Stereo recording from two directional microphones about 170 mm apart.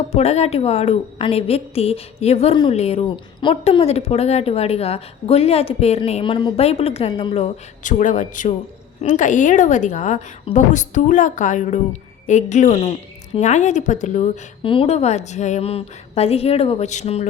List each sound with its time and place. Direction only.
0.1 s a woman's voice: 40° left (ahead or behind)
14.6 s a woman's voice: 30° left (ahead or behind)